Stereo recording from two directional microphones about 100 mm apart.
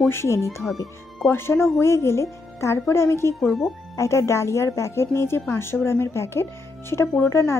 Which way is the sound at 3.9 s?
30° left (ahead or behind).